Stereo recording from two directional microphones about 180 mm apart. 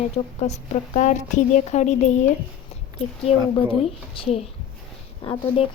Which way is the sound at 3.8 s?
35° left (ahead or behind).